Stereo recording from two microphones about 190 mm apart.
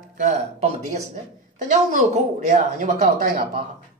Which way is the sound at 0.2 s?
35° right (ahead or behind).